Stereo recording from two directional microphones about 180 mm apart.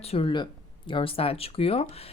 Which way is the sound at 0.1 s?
30° left (ahead or behind).